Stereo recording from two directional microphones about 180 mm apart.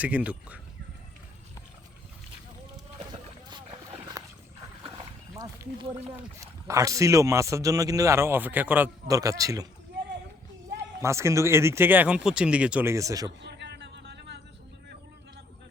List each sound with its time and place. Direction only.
0.0 s speech: 5° right (ahead or behind)
4.2 s boat: 20° right (ahead or behind)
4.8 s dog: 30° right (ahead or behind)
5.3 s a sound: 20° right (ahead or behind)
6.4 s speech: 15° right (ahead or behind)
11.0 s speech: 15° right (ahead or behind)
13.4 s a sound: 70° right (ahead or behind)